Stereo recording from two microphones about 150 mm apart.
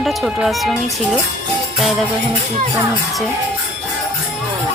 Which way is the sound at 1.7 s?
Centre (ahead or behind).